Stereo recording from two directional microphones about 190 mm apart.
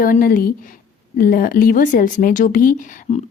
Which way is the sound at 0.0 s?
45° left (ahead or behind).